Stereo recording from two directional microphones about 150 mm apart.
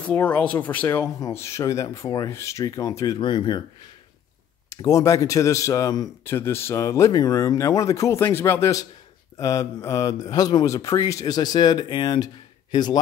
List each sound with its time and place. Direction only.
0.0 s speech: 10° left (ahead or behind); by 3.6 s 30° left (ahead or behind)
4.6 s speech: 20° left (ahead or behind)